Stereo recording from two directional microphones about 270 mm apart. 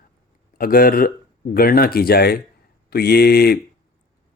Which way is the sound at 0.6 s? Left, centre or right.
Left.